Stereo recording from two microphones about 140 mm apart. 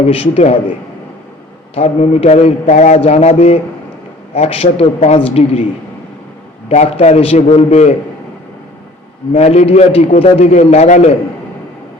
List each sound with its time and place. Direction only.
0.2 s a man's voice: 45° left (ahead or behind)
1.7 s a man's voice: 50° left (ahead or behind)
6.7 s a man's voice: 55° left (ahead or behind)
9.3 s a man's voice: 50° left (ahead or behind)